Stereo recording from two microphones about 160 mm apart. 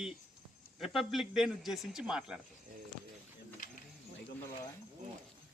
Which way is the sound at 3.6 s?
55° left (ahead or behind).